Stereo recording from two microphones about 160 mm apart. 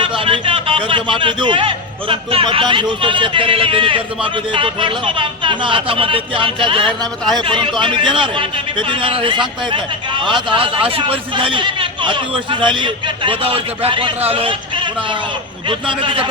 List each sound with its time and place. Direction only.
0.0 s a man's voice: 35° right (ahead or behind)